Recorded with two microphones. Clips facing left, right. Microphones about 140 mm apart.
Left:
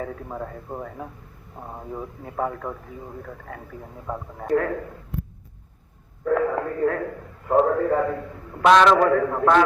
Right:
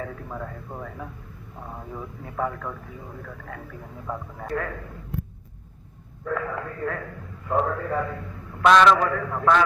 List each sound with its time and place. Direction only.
0.0 s speech: 25° left (ahead or behind)
4.0 s speech: 25° left (ahead or behind)
4.5 s a man's voice: 40° left (ahead or behind)
6.2 s a man's voice: 35° left (ahead or behind)
8.6 s speech: 30° left (ahead or behind)
9.0 s a man's voice: 45° left (ahead or behind)